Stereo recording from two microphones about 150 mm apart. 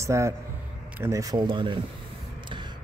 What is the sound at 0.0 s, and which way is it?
A man's voice, 20° right (ahead or behind).